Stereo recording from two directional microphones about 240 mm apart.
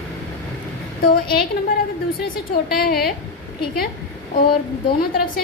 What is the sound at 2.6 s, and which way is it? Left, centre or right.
Speech, left.